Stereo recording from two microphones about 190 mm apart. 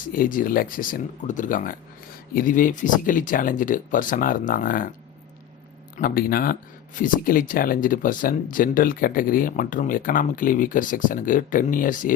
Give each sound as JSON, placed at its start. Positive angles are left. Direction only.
{"t": 0.1, "sound": "speech", "side_deg": 45}
{"t": 6.0, "sound": "speech", "side_deg": 50}